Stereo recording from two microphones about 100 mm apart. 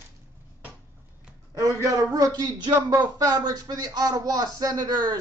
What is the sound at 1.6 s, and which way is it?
Speech, 35° right (ahead or behind).